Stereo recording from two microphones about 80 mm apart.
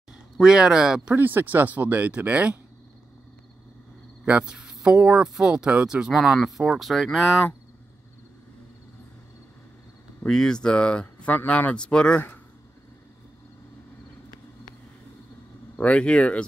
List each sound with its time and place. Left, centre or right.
0.1 s speech: centre
1.1 s speech: right
4.2 s speech: centre
10.2 s speech: centre
15.8 s speech: centre